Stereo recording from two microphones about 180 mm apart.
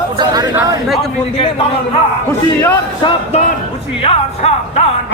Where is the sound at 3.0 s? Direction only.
40° left (ahead or behind).